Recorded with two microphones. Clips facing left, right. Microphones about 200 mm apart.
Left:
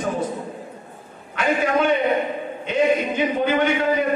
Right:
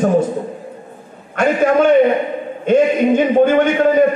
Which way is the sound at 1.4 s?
50° right (ahead or behind).